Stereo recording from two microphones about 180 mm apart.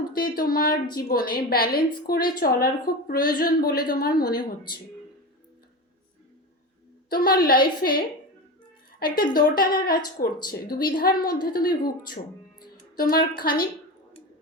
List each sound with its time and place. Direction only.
0.1 s a woman's voice: 55° left (ahead or behind)
7.1 s a woman's voice: 55° left (ahead or behind)